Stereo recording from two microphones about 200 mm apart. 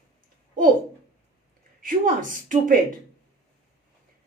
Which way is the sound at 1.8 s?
45° right (ahead or behind).